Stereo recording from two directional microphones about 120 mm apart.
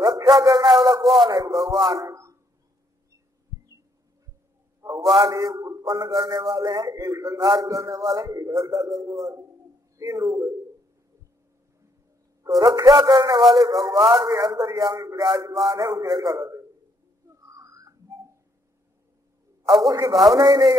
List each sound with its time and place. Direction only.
0.0 s music: 30° right (ahead or behind)
0.7 s a man's voice: 30° right (ahead or behind)
1.2 s music: 30° right (ahead or behind)
2.0 s a man's voice: 25° right (ahead or behind)
4.8 s a sound: 30° right (ahead or behind)
5.2 s a man's voice: 30° right (ahead or behind)
12.4 s music: 30° right (ahead or behind)
13.4 s a man's voice: centre (ahead or behind)
13.7 s a man's voice: 30° right (ahead or behind)
17.5 s a sound: 25° right (ahead or behind)
19.9 s music: 30° right (ahead or behind)